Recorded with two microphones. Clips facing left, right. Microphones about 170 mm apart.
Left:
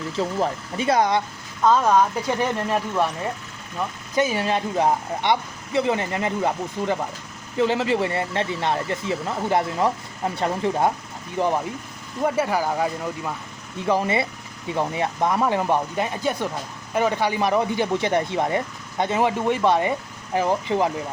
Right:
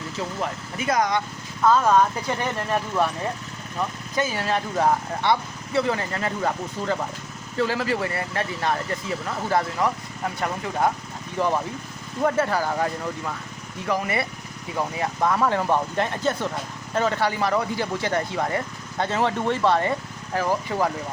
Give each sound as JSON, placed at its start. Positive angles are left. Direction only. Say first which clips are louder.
{"t": 0.2, "sound": "speech", "louder": "left 6 dB", "side_deg": 30}
{"t": 1.6, "sound": "speech", "louder": "left 1 dB", "side_deg": 15}
{"t": 4.2, "sound": "speech", "louder": "left 3 dB", "side_deg": 20}
{"t": 13.8, "sound": "speech", "louder": "left 4 dB", "side_deg": 25}